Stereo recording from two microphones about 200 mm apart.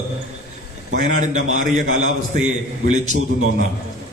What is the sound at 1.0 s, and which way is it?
A man's voice, 35° right (ahead or behind).